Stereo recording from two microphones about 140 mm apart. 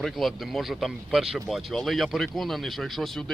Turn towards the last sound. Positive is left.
turn(degrees=0)  # may be behind; listen again after turning